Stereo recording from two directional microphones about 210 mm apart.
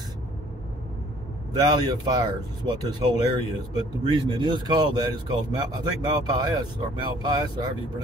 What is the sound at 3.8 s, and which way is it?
Speech, 20° right (ahead or behind).